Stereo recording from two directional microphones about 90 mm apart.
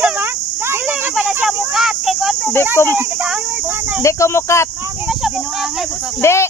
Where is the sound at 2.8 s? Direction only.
30° left (ahead or behind).